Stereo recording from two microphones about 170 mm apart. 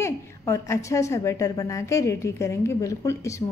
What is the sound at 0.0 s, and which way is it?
A woman's voice, 15° left (ahead or behind).